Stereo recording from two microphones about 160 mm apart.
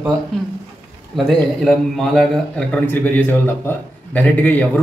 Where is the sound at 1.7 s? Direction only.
Centre (ahead or behind).